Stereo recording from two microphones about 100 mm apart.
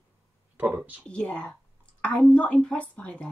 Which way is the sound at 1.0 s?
10° left (ahead or behind).